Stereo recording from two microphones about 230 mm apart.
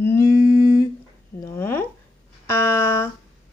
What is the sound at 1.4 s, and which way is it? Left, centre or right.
Speech, centre.